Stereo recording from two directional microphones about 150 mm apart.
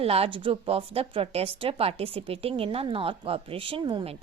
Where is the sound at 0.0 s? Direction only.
40° right (ahead or behind).